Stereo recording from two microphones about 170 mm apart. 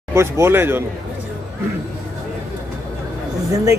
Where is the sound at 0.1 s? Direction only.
15° right (ahead or behind).